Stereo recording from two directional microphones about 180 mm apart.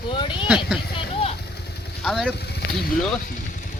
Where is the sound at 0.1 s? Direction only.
25° left (ahead or behind).